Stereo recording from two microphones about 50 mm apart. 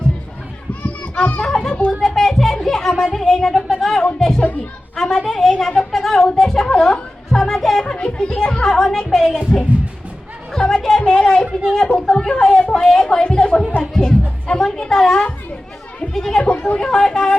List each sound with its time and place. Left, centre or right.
0.7 s children playing: left
1.9 s music: centre
3.0 s speech: centre
3.5 s a sound: centre
4.9 s a woman's voice: centre
7.9 s a child's voice: centre
8.6 s a woman's voice: centre
10.5 s speech: centre